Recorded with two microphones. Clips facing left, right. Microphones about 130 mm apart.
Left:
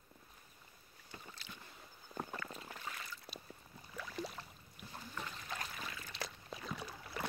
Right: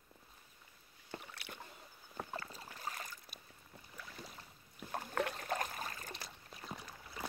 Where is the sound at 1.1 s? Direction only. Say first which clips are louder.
Right 4 dB; 65° right (ahead or behind).